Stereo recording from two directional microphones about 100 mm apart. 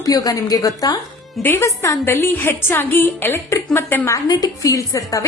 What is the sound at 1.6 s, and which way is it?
A woman's voice, 30° left (ahead or behind).